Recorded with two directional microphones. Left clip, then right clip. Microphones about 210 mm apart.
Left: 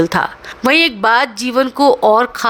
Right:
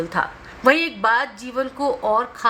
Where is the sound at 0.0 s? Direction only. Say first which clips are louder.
Left 8 dB; 45° left (ahead or behind).